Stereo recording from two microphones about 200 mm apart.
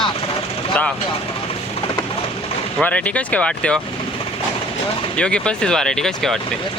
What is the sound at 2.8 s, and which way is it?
Speech, 5° left (ahead or behind).